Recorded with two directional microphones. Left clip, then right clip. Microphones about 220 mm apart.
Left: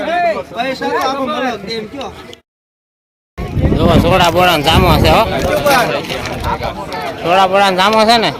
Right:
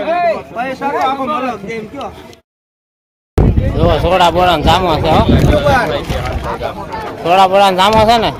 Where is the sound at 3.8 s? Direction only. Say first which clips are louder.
Right 1 dB; centre (ahead or behind).